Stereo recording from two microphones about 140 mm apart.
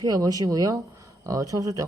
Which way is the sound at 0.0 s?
25° right (ahead or behind).